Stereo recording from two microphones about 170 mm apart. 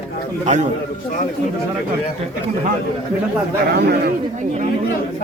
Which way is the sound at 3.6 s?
65° right (ahead or behind).